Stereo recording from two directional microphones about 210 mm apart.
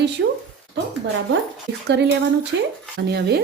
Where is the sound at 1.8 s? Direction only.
55° right (ahead or behind).